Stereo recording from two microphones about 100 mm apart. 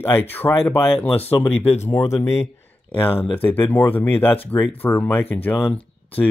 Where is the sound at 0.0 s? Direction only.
20° left (ahead or behind).